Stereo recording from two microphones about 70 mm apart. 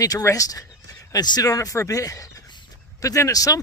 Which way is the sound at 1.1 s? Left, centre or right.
Left.